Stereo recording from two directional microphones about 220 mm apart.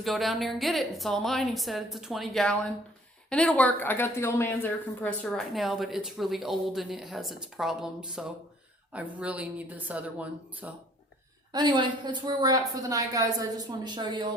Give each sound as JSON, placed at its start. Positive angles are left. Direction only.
{"t": 0.0, "sound": "a woman's voice", "side_deg": 0}
{"t": 11.5, "sound": "a woman's voice", "side_deg": -20}